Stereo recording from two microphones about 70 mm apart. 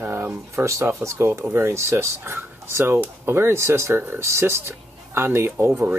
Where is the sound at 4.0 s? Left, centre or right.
Right.